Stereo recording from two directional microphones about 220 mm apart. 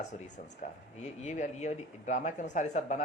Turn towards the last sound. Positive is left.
turn(degrees=35)  # may be behind; listen again after turning